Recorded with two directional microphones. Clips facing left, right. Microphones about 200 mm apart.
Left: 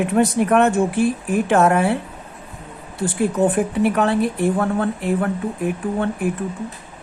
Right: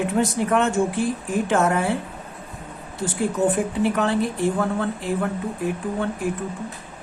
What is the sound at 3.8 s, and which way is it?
Speech, 60° left (ahead or behind).